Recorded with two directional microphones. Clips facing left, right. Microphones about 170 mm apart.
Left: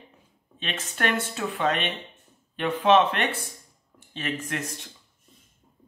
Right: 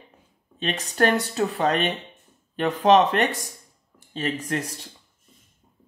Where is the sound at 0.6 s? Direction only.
40° right (ahead or behind).